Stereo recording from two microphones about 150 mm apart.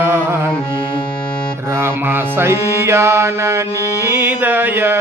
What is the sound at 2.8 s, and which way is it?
Mantra, 15° right (ahead or behind).